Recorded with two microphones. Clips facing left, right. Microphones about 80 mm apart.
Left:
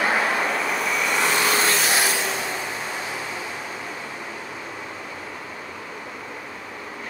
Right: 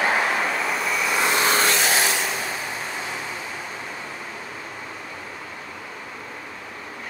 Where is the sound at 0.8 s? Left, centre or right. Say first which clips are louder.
Even; centre.